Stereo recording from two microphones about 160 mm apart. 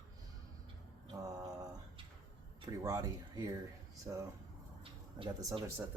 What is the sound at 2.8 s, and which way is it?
Speech, 20° right (ahead or behind).